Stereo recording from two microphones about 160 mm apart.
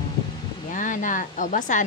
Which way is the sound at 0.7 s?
55° left (ahead or behind).